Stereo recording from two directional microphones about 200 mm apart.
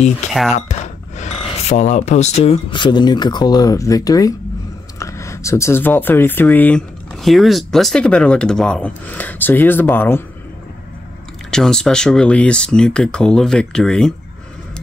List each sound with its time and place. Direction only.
0.5 s speech: 35° left (ahead or behind); by 10.2 s 10° left (ahead or behind)
11.5 s speech: 5° left (ahead or behind)